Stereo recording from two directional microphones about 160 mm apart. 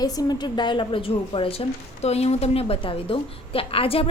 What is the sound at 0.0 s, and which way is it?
A woman's voice, 25° left (ahead or behind).